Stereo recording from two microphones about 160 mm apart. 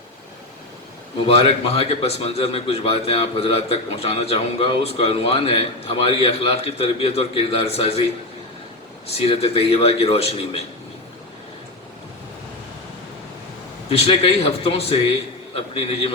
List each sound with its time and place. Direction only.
1.3 s a man's voice: 35° left (ahead or behind)
9.0 s a man's voice: 40° left (ahead or behind)
13.9 s a man's voice: 35° left (ahead or behind)